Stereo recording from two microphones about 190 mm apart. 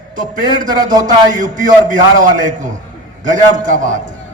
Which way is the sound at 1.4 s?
45° right (ahead or behind).